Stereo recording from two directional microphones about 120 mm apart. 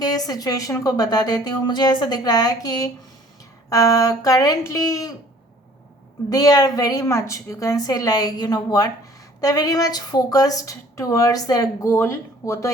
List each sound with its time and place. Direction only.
0.0 s a woman's voice: 30° left (ahead or behind)
6.3 s a woman's voice: 30° left (ahead or behind)